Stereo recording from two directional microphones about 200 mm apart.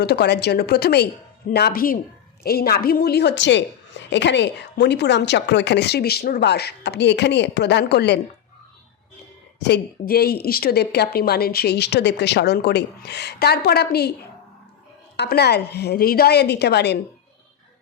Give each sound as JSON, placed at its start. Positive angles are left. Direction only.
{"t": 0.0, "sound": "a woman's voice", "side_deg": 55}
{"t": 9.6, "sound": "speech", "side_deg": 55}
{"t": 15.1, "sound": "a woman's voice", "side_deg": 55}